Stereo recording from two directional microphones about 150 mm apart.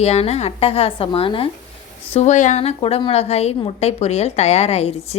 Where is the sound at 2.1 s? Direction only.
50° left (ahead or behind).